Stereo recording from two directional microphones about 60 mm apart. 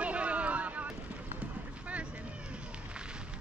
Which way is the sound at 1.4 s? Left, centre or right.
Right.